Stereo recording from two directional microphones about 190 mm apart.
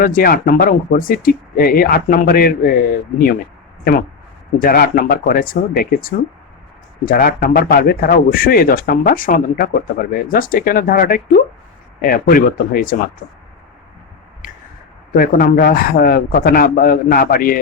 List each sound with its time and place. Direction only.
0.0 s a man's voice: 50° left (ahead or behind)
4.6 s a man's voice: 50° left (ahead or behind)
14.4 s a sound: 45° left (ahead or behind)
15.1 s a man's voice: 50° left (ahead or behind)